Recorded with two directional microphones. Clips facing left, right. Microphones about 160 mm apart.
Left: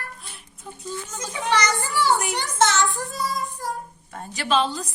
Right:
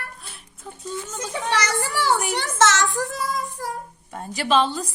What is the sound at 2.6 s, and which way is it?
Speech, 85° right.